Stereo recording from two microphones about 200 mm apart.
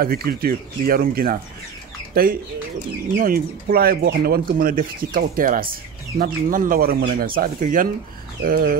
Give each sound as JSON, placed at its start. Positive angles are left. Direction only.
{"t": 0.0, "sound": "speech", "side_deg": -50}